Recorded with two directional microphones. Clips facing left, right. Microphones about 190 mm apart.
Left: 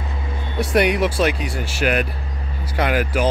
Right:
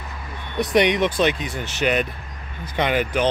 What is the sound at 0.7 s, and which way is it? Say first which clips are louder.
Speech: even; 5° left (ahead or behind).